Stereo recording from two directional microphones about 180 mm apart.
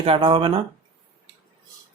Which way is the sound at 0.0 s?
30° right (ahead or behind).